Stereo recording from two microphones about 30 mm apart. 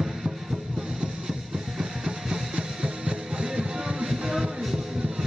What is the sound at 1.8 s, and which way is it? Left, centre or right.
Music, centre.